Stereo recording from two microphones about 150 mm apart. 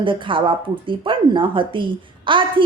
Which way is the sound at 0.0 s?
35° right (ahead or behind).